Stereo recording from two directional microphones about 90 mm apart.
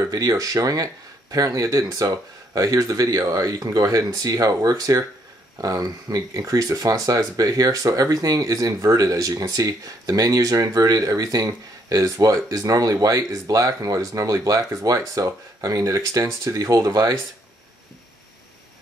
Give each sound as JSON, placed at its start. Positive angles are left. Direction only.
{"t": 0.0, "sound": "speech", "side_deg": -45}